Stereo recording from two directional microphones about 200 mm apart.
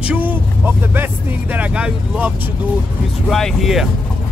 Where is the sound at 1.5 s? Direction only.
5° right (ahead or behind).